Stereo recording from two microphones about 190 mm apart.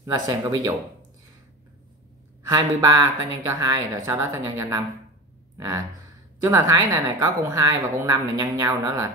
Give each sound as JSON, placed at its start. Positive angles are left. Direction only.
{"t": 0.3, "sound": "a woman's voice", "side_deg": -15}
{"t": 2.4, "sound": "a woman's voice", "side_deg": -20}